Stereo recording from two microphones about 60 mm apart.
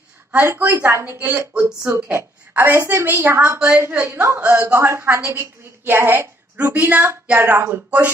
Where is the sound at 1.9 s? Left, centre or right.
Right.